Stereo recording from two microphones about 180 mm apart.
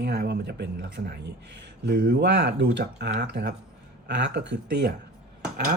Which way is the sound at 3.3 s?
75° right (ahead or behind).